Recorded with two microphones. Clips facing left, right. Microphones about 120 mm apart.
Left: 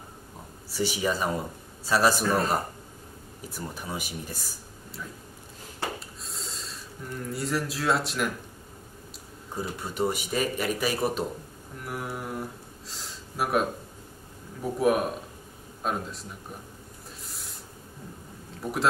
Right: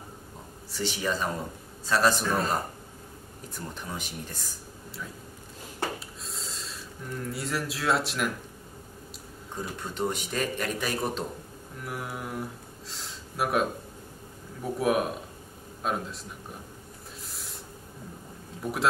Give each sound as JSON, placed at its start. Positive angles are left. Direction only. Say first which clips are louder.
{"t": 0.7, "sound": "a man's voice", "louder": "left 3 dB", "side_deg": 10}
{"t": 5.9, "sound": "snort", "louder": "even", "side_deg": 0}
{"t": 7.2, "sound": "speech", "louder": "left 3 dB", "side_deg": 0}
{"t": 9.6, "sound": "a man's voice", "louder": "left 2 dB", "side_deg": 10}
{"t": 17.3, "sound": "a sound", "louder": "right 1 dB", "side_deg": 0}
{"t": 18.6, "sound": "speech", "louder": "left 1 dB", "side_deg": 0}